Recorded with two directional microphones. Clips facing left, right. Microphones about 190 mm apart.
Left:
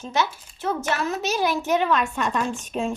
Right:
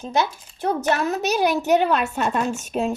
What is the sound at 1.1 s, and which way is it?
A woman's voice, 40° right (ahead or behind).